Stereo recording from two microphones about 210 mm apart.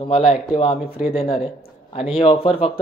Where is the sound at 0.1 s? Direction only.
25° left (ahead or behind).